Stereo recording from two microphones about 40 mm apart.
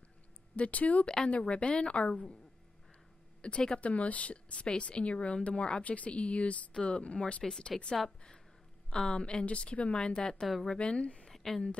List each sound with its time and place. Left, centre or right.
0.6 s a woman's voice: left
3.4 s a woman's voice: left
8.9 s a woman's voice: centre
9.9 s a woman's voice: centre
11.2 s a sound: centre